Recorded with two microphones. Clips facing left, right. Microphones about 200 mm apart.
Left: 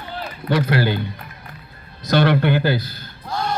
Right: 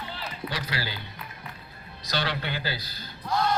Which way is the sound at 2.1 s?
55° left (ahead or behind).